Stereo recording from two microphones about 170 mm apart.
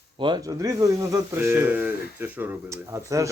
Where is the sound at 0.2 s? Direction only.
25° right (ahead or behind).